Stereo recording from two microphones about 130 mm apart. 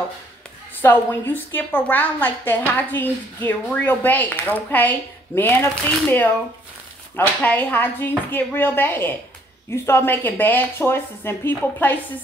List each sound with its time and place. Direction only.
0.7 s a woman's voice: 15° left (ahead or behind)